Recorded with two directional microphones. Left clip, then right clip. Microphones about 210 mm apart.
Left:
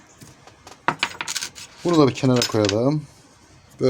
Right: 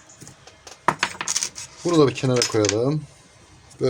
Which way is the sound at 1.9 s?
50° left (ahead or behind).